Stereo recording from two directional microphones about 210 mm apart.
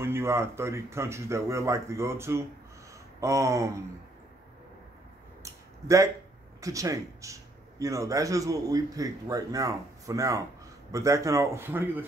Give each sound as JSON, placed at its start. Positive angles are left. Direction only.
{"t": 0.0, "sound": "speech", "side_deg": -10}
{"t": 5.4, "sound": "a sound", "side_deg": -15}
{"t": 6.6, "sound": "speech", "side_deg": -15}